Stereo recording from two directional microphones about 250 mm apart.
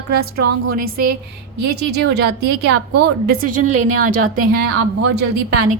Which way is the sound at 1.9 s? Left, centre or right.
Right.